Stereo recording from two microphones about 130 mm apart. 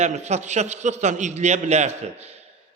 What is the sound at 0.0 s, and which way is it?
A man's voice, 60° right (ahead or behind).